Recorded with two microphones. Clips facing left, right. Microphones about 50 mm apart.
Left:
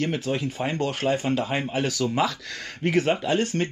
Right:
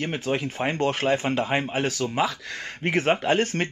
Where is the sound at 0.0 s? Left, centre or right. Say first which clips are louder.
Left 1 dB; right.